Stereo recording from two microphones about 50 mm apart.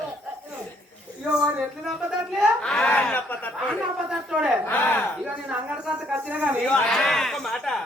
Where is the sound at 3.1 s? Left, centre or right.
Left.